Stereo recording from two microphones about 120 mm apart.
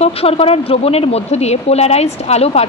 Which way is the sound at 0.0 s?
55° left (ahead or behind).